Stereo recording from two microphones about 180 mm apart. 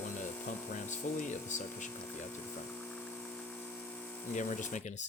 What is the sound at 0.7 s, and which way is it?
Speech, 40° left (ahead or behind).